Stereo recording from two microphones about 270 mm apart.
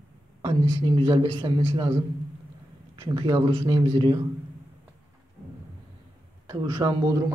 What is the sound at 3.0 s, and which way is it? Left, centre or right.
A man's voice, centre.